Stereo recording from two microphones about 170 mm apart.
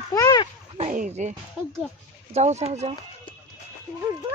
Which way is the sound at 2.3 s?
40° right (ahead or behind).